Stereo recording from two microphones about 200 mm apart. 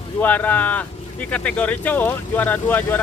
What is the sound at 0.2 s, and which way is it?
Speech, 10° left (ahead or behind).